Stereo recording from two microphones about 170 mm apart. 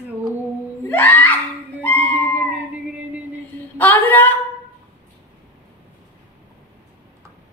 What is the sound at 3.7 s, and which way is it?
Screaming, 10° left (ahead or behind).